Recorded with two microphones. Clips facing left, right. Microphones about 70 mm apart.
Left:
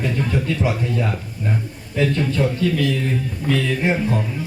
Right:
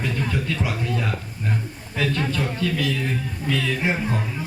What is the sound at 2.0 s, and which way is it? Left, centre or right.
Speech, left.